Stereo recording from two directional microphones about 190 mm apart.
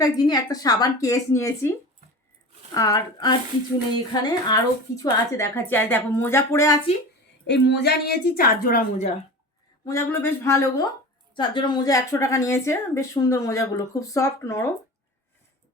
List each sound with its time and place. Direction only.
0.0 s a woman's voice: 20° left (ahead or behind)
2.7 s a woman's voice: 20° left (ahead or behind)
7.4 s a woman's voice: 65° left (ahead or behind); by 8.8 s 50° left (ahead or behind)
9.8 s a woman's voice: 15° left (ahead or behind)